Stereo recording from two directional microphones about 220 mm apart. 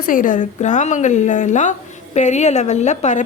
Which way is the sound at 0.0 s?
40° left (ahead or behind).